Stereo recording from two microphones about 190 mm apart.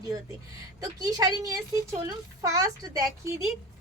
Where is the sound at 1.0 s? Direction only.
20° right (ahead or behind).